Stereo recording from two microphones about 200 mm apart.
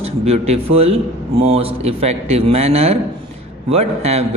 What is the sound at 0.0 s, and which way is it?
A man's voice, 30° right (ahead or behind).